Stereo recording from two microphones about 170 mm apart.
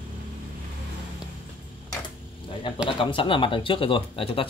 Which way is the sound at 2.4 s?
30° left (ahead or behind).